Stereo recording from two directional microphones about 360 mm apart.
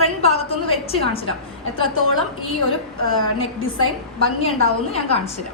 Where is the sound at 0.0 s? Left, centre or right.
Centre.